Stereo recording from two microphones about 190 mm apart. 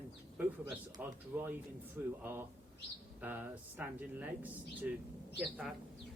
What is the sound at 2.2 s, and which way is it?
Speech, 10° right (ahead or behind).